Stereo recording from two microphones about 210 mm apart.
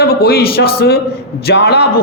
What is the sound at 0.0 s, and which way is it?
A man's voice, 50° left (ahead or behind).